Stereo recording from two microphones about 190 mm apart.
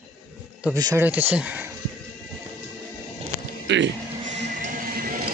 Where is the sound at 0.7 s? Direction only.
15° right (ahead or behind).